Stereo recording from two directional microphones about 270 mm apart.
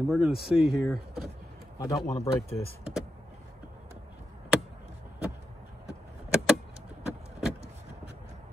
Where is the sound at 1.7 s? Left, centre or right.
Centre.